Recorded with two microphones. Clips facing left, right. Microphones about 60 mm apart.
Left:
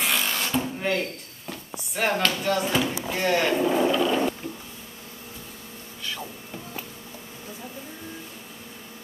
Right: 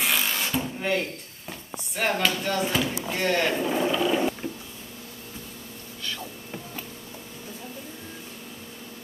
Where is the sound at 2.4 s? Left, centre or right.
Centre.